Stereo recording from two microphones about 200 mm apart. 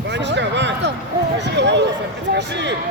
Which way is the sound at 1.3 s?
60° right (ahead or behind).